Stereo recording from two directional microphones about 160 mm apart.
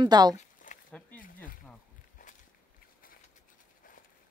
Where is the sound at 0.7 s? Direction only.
55° left (ahead or behind).